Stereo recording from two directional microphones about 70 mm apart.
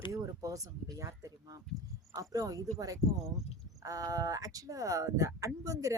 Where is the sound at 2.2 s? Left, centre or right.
Right.